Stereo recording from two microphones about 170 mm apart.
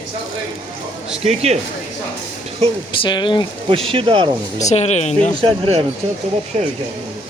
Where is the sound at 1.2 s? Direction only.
40° right (ahead or behind).